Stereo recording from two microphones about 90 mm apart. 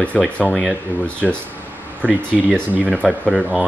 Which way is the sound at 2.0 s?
15° right (ahead or behind).